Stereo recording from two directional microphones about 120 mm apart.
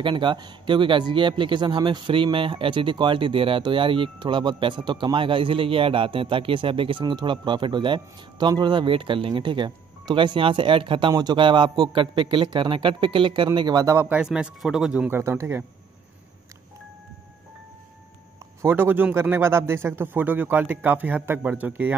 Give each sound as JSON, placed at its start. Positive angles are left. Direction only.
{"t": 0.0, "sound": "speech", "side_deg": -40}
{"t": 13.9, "sound": "speech", "side_deg": -15}
{"t": 15.1, "sound": "speech", "side_deg": -20}
{"t": 18.6, "sound": "speech", "side_deg": -20}